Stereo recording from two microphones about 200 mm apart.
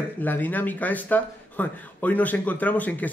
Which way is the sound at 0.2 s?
10° left (ahead or behind).